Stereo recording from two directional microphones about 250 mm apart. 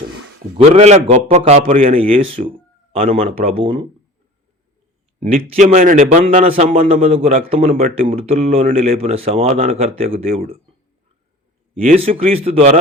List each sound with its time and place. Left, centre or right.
0.5 s a man's voice: right
5.2 s a man's voice: right
11.8 s a man's voice: right